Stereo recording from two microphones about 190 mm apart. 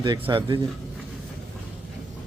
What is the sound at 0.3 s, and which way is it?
Speech, 25° right (ahead or behind).